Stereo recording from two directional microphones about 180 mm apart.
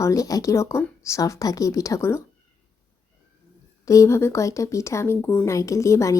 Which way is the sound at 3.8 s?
15° left (ahead or behind).